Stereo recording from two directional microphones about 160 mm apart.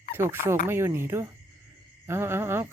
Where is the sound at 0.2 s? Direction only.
15° right (ahead or behind).